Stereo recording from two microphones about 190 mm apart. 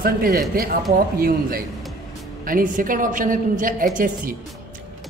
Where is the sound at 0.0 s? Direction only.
50° right (ahead or behind).